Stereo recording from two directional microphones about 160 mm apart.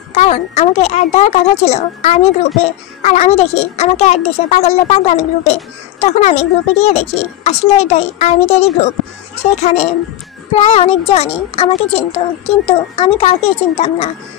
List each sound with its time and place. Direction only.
0.1 s a woman's voice: 45° left (ahead or behind)